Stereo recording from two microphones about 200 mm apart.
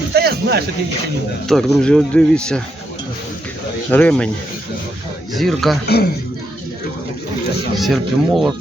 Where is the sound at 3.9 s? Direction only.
5° left (ahead or behind).